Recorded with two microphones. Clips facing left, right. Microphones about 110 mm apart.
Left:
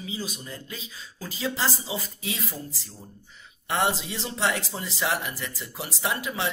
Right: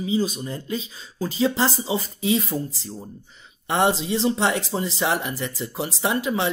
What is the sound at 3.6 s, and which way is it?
Speech, 25° right (ahead or behind).